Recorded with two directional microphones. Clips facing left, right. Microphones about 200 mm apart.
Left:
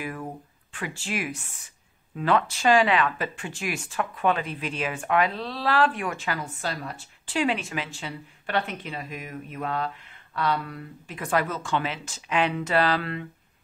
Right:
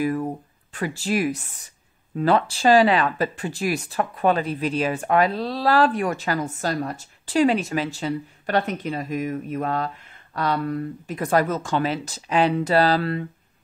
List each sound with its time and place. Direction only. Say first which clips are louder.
0.0 s speech: right 10 dB; 40° right (ahead or behind)